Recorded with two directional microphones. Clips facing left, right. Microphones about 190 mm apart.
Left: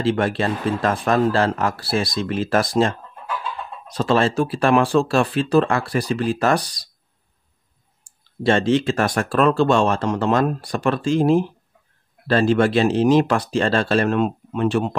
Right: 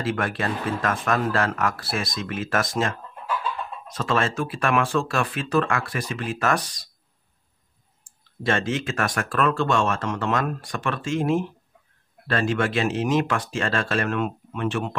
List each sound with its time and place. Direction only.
0.0 s speech: 30° left (ahead or behind)
8.0 s speech: 30° left (ahead or behind)